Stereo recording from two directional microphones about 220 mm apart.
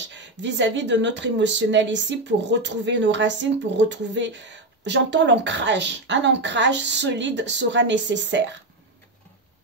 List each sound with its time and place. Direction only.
0.1 s speech: 55° right (ahead or behind)